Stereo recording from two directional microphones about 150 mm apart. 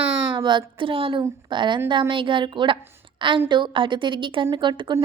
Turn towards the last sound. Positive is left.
turn(degrees=-30)  # may be behind; listen again after turning